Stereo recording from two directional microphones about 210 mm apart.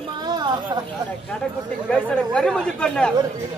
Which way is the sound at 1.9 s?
5° left (ahead or behind).